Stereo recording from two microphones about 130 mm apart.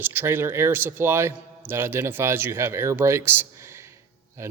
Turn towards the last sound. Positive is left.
turn(degrees=-20)  # may be behind; listen again after turning